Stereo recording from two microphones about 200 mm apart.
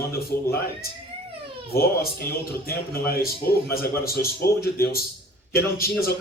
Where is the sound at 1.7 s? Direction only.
50° left (ahead or behind).